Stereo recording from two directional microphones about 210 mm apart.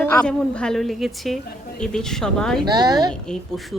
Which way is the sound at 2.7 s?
20° right (ahead or behind).